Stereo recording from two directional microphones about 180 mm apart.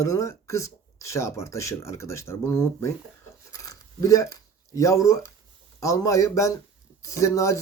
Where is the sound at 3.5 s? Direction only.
20° left (ahead or behind).